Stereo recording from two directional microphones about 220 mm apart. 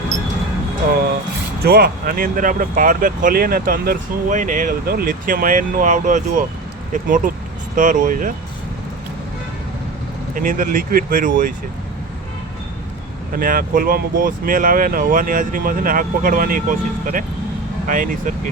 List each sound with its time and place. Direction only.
1.6 s speech: 45° right (ahead or behind)
10.3 s speech: 40° right (ahead or behind)
13.3 s speech: 40° right (ahead or behind)